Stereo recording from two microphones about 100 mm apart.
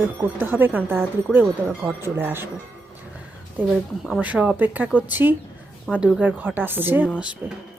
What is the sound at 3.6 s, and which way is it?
Speech, 20° right (ahead or behind).